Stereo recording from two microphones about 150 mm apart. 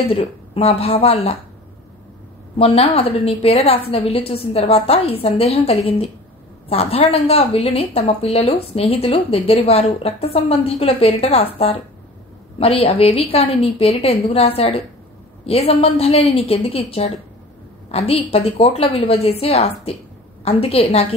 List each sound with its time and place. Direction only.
0.1 s a woman's voice: 40° left (ahead or behind)
2.5 s a woman's voice: 40° left (ahead or behind)